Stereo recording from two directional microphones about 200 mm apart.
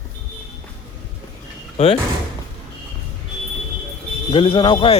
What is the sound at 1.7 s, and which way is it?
Speech, 30° left (ahead or behind).